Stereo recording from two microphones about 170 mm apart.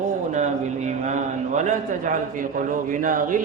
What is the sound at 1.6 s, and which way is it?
A man's voice, 45° right (ahead or behind).